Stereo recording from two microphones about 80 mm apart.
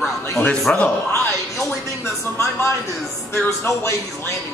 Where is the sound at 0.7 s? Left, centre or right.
Centre.